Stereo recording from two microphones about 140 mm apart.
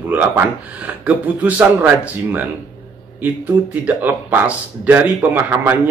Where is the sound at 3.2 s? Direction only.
10° right (ahead or behind).